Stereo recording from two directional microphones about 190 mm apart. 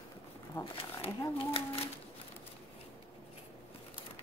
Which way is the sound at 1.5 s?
30° left (ahead or behind).